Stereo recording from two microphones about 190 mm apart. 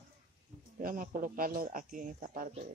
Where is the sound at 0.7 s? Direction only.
45° right (ahead or behind).